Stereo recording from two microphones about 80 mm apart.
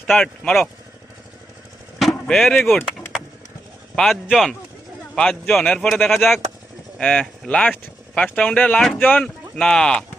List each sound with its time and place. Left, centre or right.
2.0 s chop: centre
2.6 s speech: left
3.9 s speech: centre
5.1 s speech: centre
7.0 s speech: centre
9.2 s speech: centre